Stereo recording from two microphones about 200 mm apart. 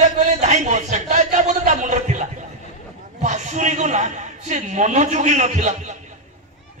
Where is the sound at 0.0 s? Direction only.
35° right (ahead or behind).